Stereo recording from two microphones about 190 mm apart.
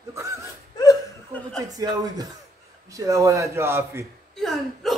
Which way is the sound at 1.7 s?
20° right (ahead or behind).